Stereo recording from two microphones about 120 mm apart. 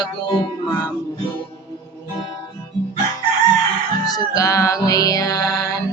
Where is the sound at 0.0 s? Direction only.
35° left (ahead or behind).